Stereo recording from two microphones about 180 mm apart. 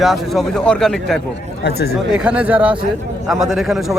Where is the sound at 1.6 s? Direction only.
60° left (ahead or behind).